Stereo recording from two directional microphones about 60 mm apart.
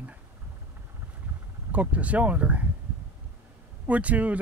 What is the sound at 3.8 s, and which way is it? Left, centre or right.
Speech, right.